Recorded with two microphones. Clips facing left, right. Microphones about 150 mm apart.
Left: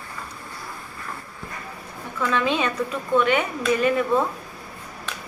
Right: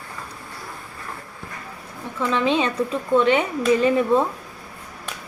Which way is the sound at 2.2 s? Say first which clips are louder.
Right 2 dB; 25° right (ahead or behind).